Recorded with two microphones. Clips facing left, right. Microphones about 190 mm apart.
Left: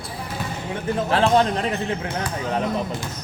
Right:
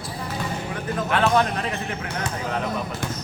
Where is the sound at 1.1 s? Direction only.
30° left (ahead or behind).